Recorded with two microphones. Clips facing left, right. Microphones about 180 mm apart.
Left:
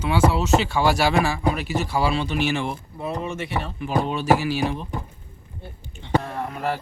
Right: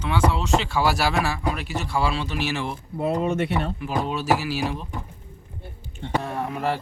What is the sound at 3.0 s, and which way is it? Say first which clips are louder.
Speech: right 6 dB; 60° right (ahead or behind).